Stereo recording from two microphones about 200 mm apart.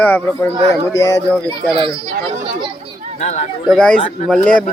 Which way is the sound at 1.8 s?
25° right (ahead or behind).